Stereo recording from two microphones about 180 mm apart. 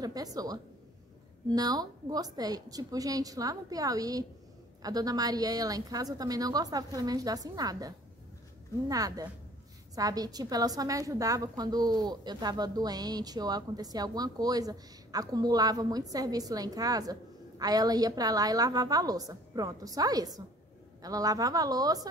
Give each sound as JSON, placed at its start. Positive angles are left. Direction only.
{"t": 0.0, "sound": "a woman's voice", "side_deg": -20}